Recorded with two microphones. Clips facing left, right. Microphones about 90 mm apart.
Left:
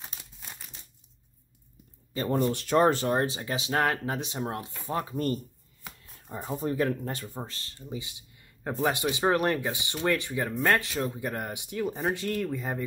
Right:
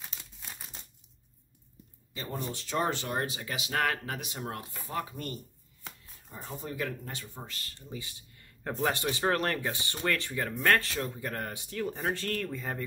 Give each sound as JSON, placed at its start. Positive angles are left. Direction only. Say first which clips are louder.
{"t": 2.1, "sound": "speech", "louder": "left 11 dB", "side_deg": 45}
{"t": 2.5, "sound": "speech", "louder": "left 6 dB", "side_deg": 55}